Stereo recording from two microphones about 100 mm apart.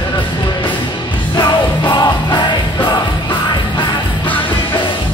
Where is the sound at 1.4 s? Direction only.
45° left (ahead or behind).